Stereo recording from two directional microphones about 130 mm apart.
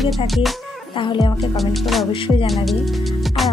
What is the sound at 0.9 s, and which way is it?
Speech, 35° left (ahead or behind).